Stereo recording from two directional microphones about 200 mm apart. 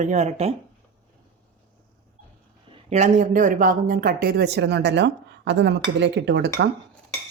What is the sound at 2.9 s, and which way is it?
Speech, 40° right (ahead or behind).